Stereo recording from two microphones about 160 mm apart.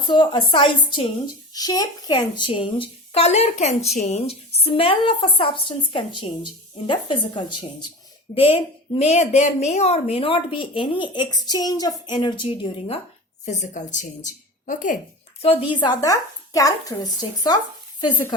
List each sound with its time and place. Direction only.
0.0 s a woman's voice: 30° left (ahead or behind)
13.4 s a woman's voice: 45° left (ahead or behind)
15.4 s speech: 35° left (ahead or behind)